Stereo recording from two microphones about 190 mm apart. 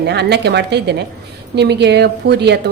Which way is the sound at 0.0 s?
60° right (ahead or behind).